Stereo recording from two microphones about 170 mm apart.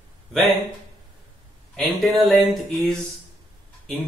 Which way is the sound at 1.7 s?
Centre (ahead or behind).